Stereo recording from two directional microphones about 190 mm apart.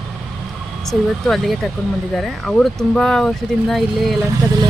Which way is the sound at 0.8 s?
Centre (ahead or behind).